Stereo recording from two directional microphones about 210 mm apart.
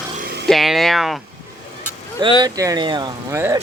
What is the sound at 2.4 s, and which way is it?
Speech, 15° right (ahead or behind).